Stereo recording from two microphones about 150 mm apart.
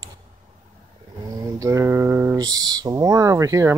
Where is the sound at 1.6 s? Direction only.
20° right (ahead or behind).